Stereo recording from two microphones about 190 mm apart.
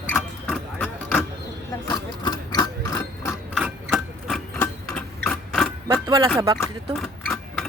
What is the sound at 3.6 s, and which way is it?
Sewing machine, centre (ahead or behind).